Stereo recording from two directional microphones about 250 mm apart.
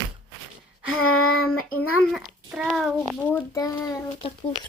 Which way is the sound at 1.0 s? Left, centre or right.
Left.